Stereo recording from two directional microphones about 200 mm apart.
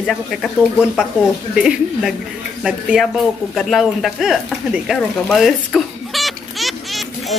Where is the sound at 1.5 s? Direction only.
5° right (ahead or behind).